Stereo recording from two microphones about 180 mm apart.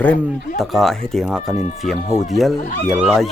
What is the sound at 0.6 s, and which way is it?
Speech, centre (ahead or behind).